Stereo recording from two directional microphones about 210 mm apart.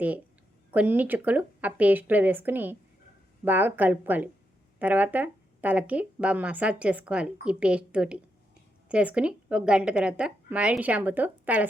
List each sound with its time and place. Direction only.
0.7 s speech: 5° right (ahead or behind)